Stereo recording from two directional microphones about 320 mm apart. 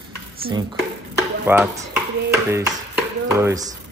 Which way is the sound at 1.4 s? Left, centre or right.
Centre.